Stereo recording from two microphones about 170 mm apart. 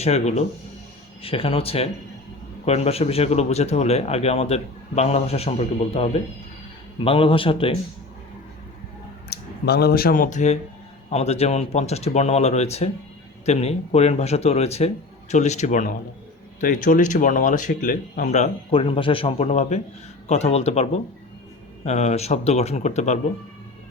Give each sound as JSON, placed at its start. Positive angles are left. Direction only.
{"t": 0.0, "sound": "speech", "side_deg": 40}
{"t": 9.3, "sound": "speech", "side_deg": 65}